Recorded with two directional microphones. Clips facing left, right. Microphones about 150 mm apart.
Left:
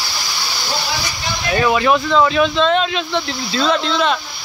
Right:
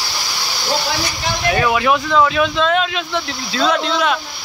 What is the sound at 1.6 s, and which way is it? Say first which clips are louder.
Speech: left 3 dB; 5° right (ahead or behind).